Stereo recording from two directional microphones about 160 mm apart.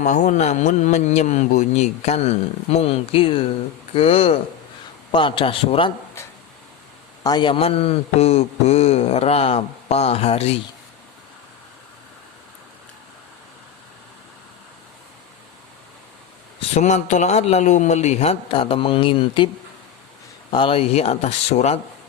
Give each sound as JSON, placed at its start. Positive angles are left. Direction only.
{"t": 0.0, "sound": "a man's voice", "side_deg": 50}
{"t": 7.3, "sound": "a man's voice", "side_deg": 30}
{"t": 16.6, "sound": "a man's voice", "side_deg": 45}
{"t": 20.5, "sound": "a man's voice", "side_deg": 35}